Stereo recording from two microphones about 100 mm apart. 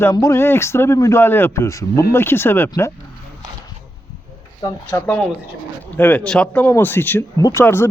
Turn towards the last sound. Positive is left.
turn(degrees=25)  # may be behind; listen again after turning